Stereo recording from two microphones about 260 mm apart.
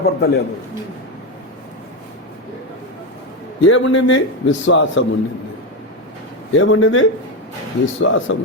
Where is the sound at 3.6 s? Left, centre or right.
Left.